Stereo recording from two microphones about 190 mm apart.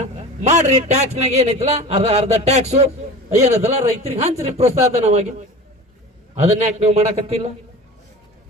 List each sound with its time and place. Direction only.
0.2 s a man's voice: 35° right (ahead or behind)
6.3 s a man's voice: 35° right (ahead or behind)